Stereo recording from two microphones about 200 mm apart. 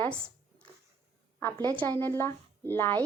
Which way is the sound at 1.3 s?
10° left (ahead or behind).